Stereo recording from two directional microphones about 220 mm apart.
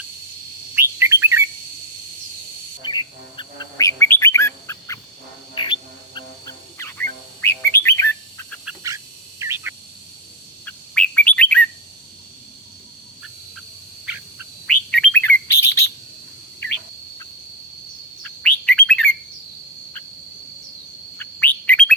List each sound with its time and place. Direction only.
0.8 s bird: 10° right (ahead or behind)
2.8 s bird: 20° left (ahead or behind)
5.6 s music: 20° left (ahead or behind)
6.1 s fowl: 15° left (ahead or behind)
7.4 s bird: 10° left (ahead or behind)
8.6 s duck: 15° right (ahead or behind)
9.4 s a sound: 10° right (ahead or behind)
10.7 s bird: 5° left (ahead or behind)
14.0 s a sound: 5° right (ahead or behind)
14.8 s bird: 5° left (ahead or behind)
18.4 s chirp: 5° left (ahead or behind)
21.2 s bird: 5° left (ahead or behind)